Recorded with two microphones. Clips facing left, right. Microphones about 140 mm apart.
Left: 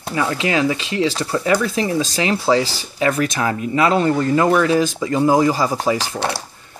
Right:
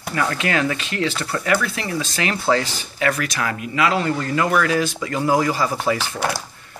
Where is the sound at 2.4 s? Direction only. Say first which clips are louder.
Left 2 dB; 10° left (ahead or behind).